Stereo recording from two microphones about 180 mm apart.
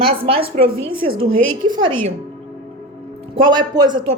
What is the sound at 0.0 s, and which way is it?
A woman's voice, 30° right (ahead or behind).